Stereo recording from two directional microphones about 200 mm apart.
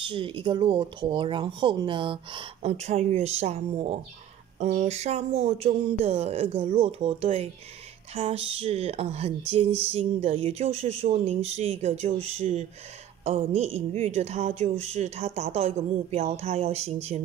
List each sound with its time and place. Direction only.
0.0 s speech: 25° right (ahead or behind)